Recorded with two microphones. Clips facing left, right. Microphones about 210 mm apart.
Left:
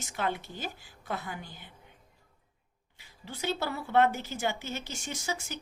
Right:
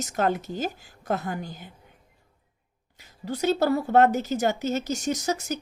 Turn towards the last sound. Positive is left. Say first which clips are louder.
# right 9 dB
turn(degrees=-40)  # may be behind; listen again after turning